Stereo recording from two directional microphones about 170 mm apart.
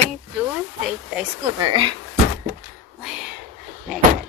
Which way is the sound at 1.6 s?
25° right (ahead or behind).